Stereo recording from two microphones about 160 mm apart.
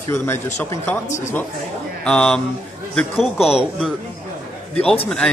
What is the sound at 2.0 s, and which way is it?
A man's voice, 5° left (ahead or behind).